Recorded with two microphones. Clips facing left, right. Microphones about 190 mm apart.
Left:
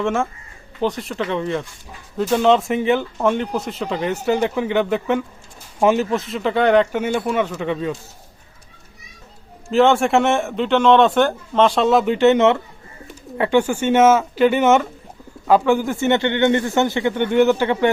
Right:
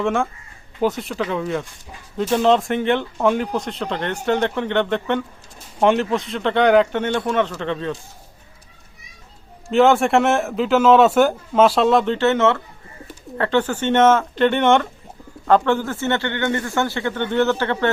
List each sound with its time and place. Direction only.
0.0 s speech: centre (ahead or behind)
9.6 s speech: centre (ahead or behind)
12.1 s a man's voice: 15° left (ahead or behind)